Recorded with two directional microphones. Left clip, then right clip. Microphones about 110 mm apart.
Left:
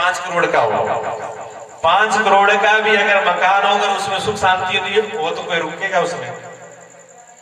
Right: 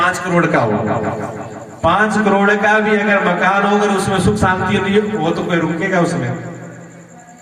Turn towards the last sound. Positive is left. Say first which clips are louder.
# right 1 dB
turn(degrees=20)  # may be behind; listen again after turning